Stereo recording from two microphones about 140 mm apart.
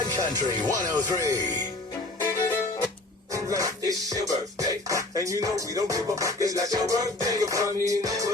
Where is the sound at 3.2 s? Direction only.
25° right (ahead or behind).